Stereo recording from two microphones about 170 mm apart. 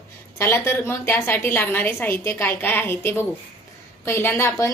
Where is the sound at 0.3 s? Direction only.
15° left (ahead or behind).